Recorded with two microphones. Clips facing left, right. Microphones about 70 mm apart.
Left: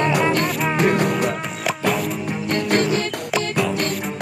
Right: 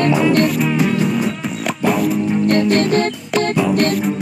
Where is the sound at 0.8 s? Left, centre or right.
Left.